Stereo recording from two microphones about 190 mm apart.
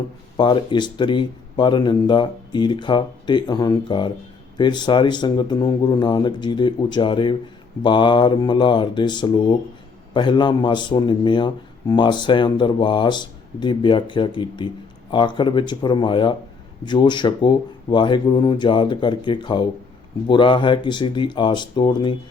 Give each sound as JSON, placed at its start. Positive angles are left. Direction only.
{"t": 0.3, "sound": "a man's voice", "side_deg": 25}